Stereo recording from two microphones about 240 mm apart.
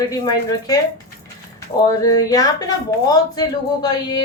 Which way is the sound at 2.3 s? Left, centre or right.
Centre.